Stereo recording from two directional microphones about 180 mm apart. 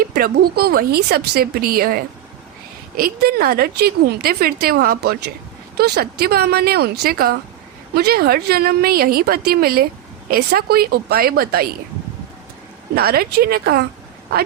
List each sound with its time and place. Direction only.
0.0 s speech: 60° right (ahead or behind)
12.9 s speech: 60° right (ahead or behind)